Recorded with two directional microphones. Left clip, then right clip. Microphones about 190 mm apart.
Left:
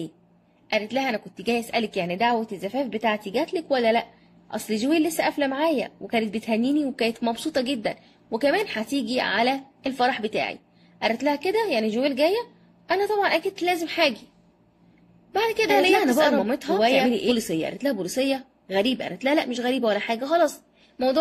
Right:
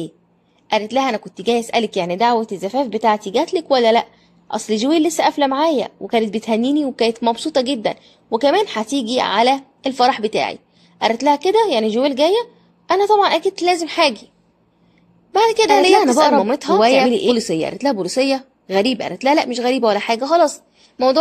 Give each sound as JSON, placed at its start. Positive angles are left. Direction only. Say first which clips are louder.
{"t": 0.7, "sound": "a woman's voice", "louder": "right 7 dB", "side_deg": -15}
{"t": 15.3, "sound": "a woman's voice", "louder": "right 8 dB", "side_deg": -15}